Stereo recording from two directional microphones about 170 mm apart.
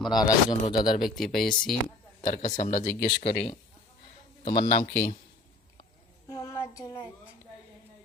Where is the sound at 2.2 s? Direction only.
45° left (ahead or behind).